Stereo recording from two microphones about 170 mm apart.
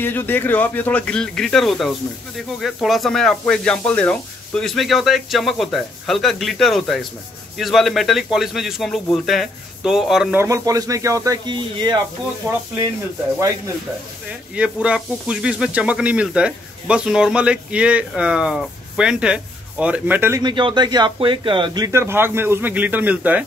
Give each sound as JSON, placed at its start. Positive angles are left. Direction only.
{"t": 0.0, "sound": "speech", "side_deg": 10}
{"t": 10.4, "sound": "speech", "side_deg": -20}
{"t": 14.5, "sound": "speech", "side_deg": -5}
{"t": 20.4, "sound": "speech", "side_deg": -25}